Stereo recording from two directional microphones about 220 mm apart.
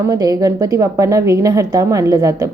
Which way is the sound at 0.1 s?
15° right (ahead or behind).